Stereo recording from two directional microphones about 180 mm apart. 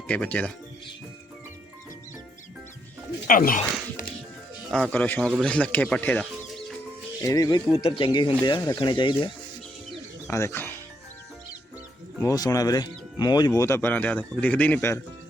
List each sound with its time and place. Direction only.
0.1 s speech: 10° left (ahead or behind)
3.2 s speech: 50° left (ahead or behind)
4.7 s speech: 5° left (ahead or behind)
7.2 s speech: 20° left (ahead or behind)
7.7 s speech: 30° left (ahead or behind)
10.2 s speech: 15° left (ahead or behind)
12.2 s speech: 20° left (ahead or behind)